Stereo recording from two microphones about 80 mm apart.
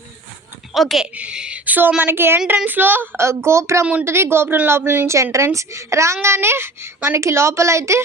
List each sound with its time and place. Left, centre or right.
0.7 s a woman's voice: centre
1.1 s a woman's voice: centre
3.2 s a woman's voice: right
5.0 s a woman's voice: right